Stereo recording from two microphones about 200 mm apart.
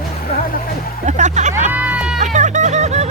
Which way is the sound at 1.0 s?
35° right (ahead or behind).